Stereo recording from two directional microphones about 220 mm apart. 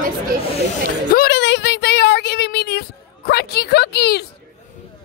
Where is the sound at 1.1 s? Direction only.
50° left (ahead or behind).